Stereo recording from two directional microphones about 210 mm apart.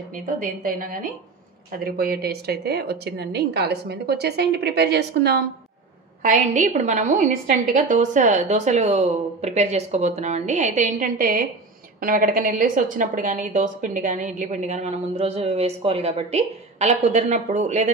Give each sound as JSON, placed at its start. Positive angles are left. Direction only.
{"t": 0.4, "sound": "a woman's voice", "side_deg": -40}
{"t": 6.2, "sound": "a woman's voice", "side_deg": -35}